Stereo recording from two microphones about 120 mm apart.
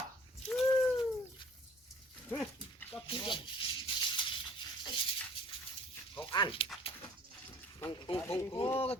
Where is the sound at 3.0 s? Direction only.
40° left (ahead or behind).